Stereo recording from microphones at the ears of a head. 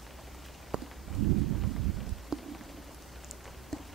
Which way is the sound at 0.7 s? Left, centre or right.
Right.